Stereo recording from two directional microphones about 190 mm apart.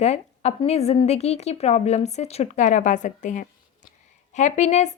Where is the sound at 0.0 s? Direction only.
35° left (ahead or behind).